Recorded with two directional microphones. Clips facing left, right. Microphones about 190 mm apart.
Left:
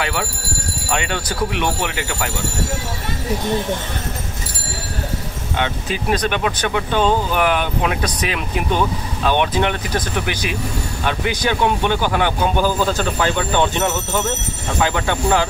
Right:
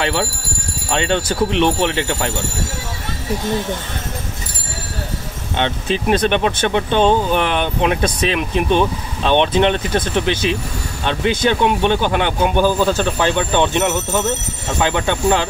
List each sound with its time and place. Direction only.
0.0 s speech: 25° right (ahead or behind)
5.6 s speech: 25° right (ahead or behind)